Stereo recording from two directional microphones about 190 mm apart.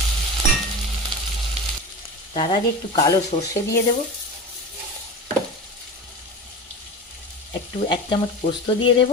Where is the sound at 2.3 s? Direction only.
25° left (ahead or behind).